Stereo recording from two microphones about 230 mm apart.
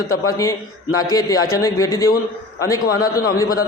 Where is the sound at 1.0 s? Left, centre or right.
Centre.